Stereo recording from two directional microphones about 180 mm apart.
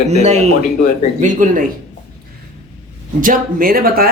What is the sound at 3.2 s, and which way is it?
Speech, 50° right (ahead or behind).